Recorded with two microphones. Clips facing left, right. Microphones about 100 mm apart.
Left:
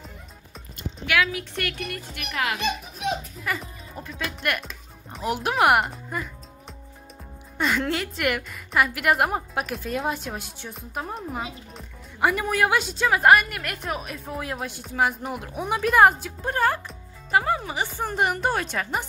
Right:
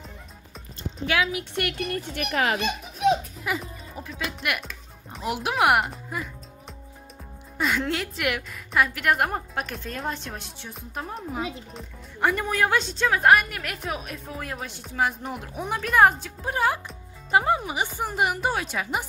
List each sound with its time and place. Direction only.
1.0 s a child's voice: 30° right (ahead or behind)
3.4 s speech: 5° right (ahead or behind)
7.5 s speech: centre (ahead or behind)
16.5 s speech: 10° right (ahead or behind)
17.3 s speech: 20° right (ahead or behind)
17.8 s speech: 5° right (ahead or behind)